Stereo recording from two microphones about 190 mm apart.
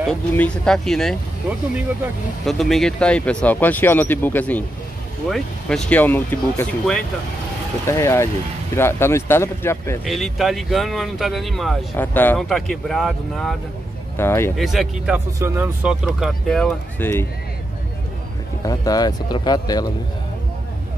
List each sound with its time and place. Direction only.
0.0 s speech: 5° left (ahead or behind)
2.4 s speech: centre (ahead or behind)
10.0 s speech: centre (ahead or behind)
14.1 s speech: 15° left (ahead or behind)
14.6 s speech: centre (ahead or behind)
15.1 s speech: 15° right (ahead or behind); by 17.3 s 10° left (ahead or behind)
18.7 s speech: 20° left (ahead or behind)